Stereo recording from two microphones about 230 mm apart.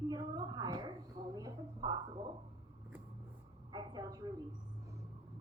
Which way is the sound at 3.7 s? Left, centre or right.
Centre.